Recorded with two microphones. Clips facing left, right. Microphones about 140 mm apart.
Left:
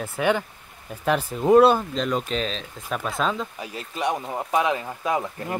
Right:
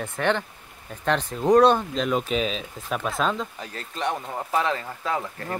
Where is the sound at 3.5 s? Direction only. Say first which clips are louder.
Left 2 dB; 10° left (ahead or behind).